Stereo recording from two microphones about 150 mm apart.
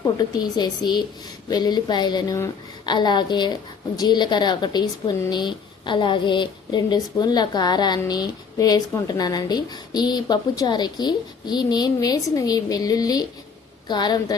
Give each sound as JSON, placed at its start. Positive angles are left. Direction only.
{"t": 0.0, "sound": "a woman's voice", "side_deg": 25}